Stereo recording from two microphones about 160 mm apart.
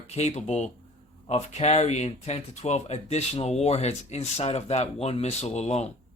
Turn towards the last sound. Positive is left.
turn(degrees=45)  # may be behind; listen again after turning